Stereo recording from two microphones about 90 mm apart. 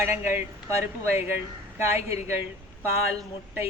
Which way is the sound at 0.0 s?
25° right (ahead or behind).